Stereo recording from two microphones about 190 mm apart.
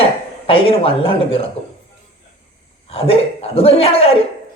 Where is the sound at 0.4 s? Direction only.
30° left (ahead or behind).